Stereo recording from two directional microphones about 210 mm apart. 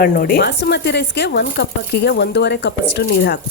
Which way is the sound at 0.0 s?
45° left (ahead or behind).